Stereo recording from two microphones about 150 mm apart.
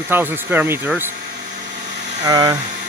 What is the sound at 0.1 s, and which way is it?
Speech, 15° right (ahead or behind).